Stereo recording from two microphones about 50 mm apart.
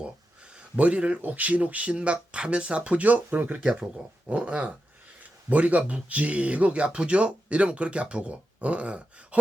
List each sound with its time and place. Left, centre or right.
0.5 s speech: right
3.6 s speech: centre